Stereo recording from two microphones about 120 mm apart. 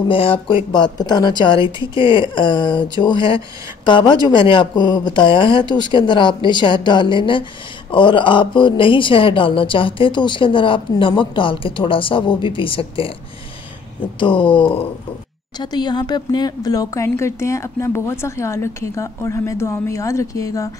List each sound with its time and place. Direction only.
0.1 s speech: 50° left (ahead or behind)
0.7 s speech: 35° left (ahead or behind)
14.2 s speech: 45° left (ahead or behind)
15.6 s speech: 35° left (ahead or behind)